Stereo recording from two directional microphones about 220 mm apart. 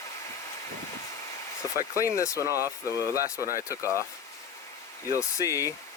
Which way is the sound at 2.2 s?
15° left (ahead or behind).